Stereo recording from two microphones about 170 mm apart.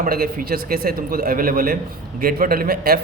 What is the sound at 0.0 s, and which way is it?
A man's voice, 60° right (ahead or behind).